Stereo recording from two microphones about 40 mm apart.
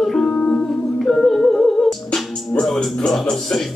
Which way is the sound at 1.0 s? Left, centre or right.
Centre.